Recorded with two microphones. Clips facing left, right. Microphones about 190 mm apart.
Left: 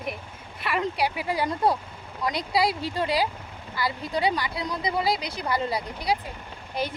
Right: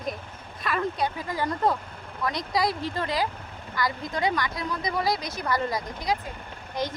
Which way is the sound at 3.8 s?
30° left (ahead or behind).